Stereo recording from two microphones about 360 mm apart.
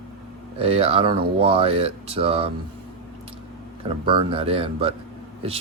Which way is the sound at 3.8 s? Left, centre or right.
Centre.